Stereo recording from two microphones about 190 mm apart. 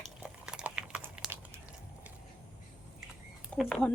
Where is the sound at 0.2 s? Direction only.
5° right (ahead or behind).